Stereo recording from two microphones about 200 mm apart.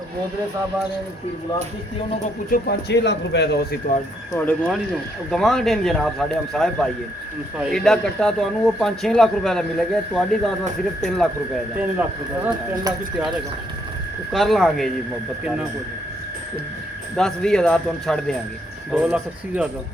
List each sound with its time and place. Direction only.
2.5 s speech: 55° left (ahead or behind)
4.4 s a man's voice: 5° left (ahead or behind)
14.3 s a man's voice: centre (ahead or behind)
17.2 s a man's voice: 5° left (ahead or behind)